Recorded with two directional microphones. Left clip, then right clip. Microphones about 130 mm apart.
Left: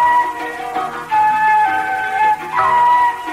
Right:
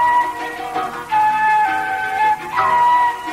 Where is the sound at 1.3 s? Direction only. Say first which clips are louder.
Left 3 dB; 35° left (ahead or behind).